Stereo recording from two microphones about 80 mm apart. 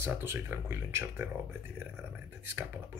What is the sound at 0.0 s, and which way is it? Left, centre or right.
Speech, right.